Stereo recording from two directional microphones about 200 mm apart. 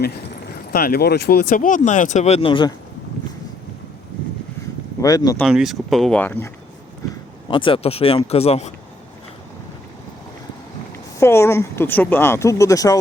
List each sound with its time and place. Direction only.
0.7 s speech: 50° left (ahead or behind); by 2.7 s 25° left (ahead or behind)
4.9 s speech: 20° left (ahead or behind)
5.4 s speech: centre (ahead or behind)
7.4 s speech: 25° left (ahead or behind)
11.2 s speech: 15° left (ahead or behind)